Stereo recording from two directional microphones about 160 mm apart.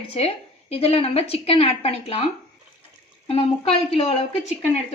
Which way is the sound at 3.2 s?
35° left (ahead or behind).